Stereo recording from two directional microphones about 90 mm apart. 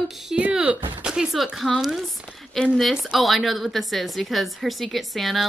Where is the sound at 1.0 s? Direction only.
5° right (ahead or behind).